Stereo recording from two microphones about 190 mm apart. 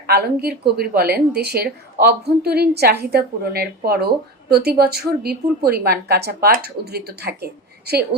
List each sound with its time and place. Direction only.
0.1 s a woman's voice: 55° right (ahead or behind)